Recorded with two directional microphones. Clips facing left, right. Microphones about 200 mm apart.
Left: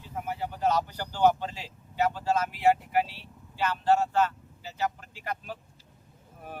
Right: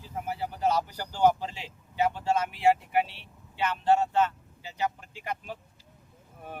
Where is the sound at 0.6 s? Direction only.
10° right (ahead or behind).